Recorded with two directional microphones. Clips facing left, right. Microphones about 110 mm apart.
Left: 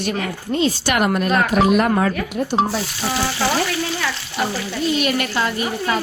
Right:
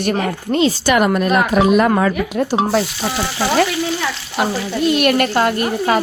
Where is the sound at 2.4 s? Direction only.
90° right.